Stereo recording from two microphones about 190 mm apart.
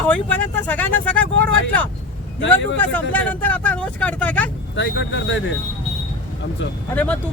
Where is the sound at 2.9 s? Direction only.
10° left (ahead or behind).